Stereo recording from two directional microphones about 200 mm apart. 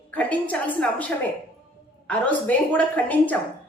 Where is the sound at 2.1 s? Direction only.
5° left (ahead or behind).